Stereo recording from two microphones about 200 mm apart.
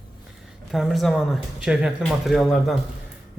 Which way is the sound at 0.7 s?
Centre (ahead or behind).